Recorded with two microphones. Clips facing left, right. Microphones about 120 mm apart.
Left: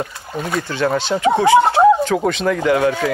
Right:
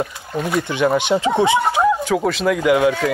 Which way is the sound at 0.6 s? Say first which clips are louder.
Right 1 dB; 15° right (ahead or behind).